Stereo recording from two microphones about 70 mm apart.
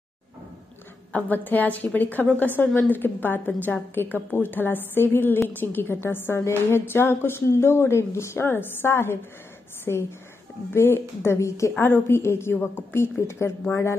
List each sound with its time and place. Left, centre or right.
1.1 s a woman's voice: left
11.8 s a woman's voice: left